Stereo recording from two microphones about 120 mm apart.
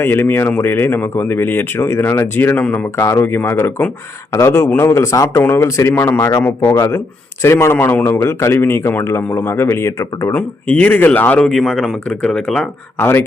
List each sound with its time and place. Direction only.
0.0 s a man's voice: 20° left (ahead or behind)
10.3 s speech: 10° left (ahead or behind)
13.0 s a man's voice: 20° left (ahead or behind)